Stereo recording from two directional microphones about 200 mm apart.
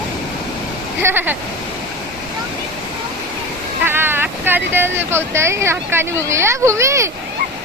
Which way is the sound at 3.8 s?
10° right (ahead or behind).